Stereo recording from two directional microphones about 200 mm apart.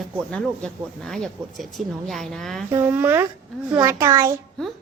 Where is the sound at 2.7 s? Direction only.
10° right (ahead or behind).